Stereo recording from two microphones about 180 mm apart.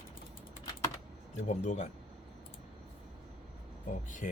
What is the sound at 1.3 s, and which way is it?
Speech, 40° left (ahead or behind).